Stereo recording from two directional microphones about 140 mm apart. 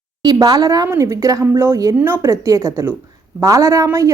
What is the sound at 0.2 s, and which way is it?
A woman's voice, 30° right (ahead or behind).